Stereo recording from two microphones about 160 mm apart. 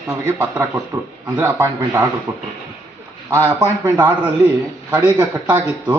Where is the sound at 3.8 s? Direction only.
10° right (ahead or behind).